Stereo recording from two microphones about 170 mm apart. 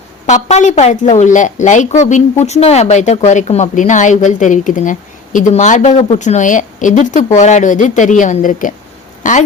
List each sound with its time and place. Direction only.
0.3 s speech: 45° left (ahead or behind)